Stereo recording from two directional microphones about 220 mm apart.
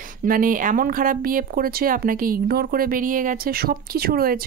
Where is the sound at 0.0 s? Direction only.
40° right (ahead or behind).